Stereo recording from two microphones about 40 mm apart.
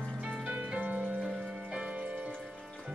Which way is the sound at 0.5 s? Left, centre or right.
Right.